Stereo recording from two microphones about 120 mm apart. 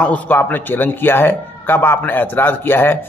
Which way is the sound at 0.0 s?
15° left (ahead or behind).